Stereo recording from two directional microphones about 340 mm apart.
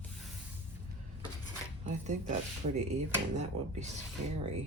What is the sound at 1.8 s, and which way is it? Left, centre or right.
Speech, right.